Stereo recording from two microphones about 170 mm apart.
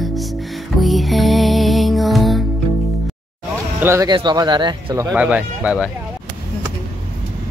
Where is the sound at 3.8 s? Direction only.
15° right (ahead or behind).